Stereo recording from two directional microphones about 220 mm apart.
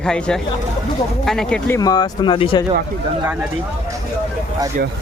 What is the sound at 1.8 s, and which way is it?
Speech, 20° left (ahead or behind).